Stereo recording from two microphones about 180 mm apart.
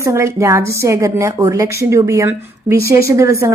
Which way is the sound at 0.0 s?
15° right (ahead or behind).